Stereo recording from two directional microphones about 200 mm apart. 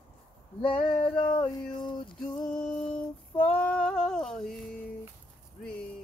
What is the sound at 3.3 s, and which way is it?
Female singing, 10° left (ahead or behind).